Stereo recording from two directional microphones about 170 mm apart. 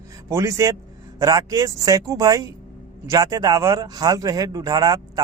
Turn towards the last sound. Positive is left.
turn(degrees=-20)  # may be behind; listen again after turning